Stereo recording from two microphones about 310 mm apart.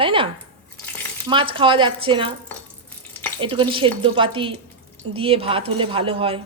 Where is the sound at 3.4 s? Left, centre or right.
Centre.